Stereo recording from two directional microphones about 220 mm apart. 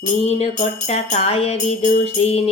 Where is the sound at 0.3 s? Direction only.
30° left (ahead or behind).